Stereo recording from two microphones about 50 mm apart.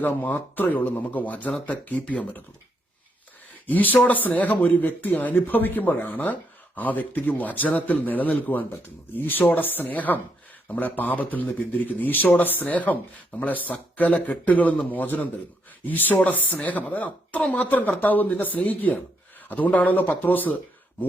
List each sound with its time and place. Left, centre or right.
0.0 s a man's voice: left
3.7 s a man's voice: left